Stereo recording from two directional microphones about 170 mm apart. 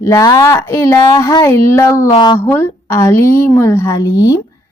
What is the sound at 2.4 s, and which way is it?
Speech, 15° left (ahead or behind).